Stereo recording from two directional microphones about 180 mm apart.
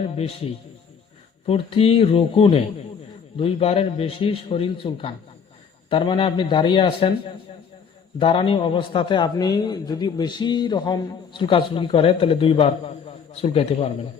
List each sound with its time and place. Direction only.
0.2 s a man's voice: 30° left (ahead or behind)